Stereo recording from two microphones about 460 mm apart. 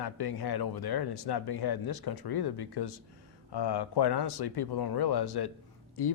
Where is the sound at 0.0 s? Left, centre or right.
Left.